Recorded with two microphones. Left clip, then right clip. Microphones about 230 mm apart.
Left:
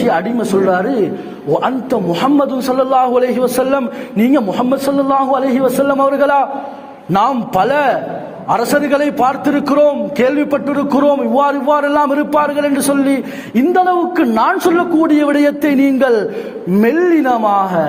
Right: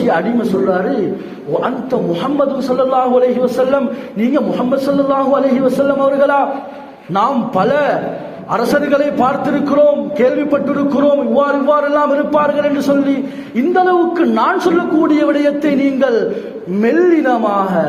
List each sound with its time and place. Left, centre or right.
0.1 s a man's voice: left